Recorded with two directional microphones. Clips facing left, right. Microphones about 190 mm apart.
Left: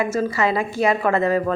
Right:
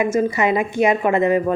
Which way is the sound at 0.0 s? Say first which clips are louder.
Right 3 dB; 15° right (ahead or behind).